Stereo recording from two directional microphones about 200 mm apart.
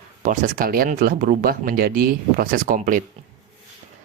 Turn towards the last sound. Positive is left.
turn(degrees=-45)  # may be behind; listen again after turning